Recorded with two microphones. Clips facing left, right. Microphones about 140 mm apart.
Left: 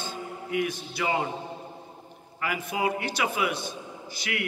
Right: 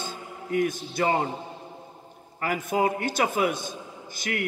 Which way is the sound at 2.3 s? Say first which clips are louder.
Right 4 dB; 45° right (ahead or behind).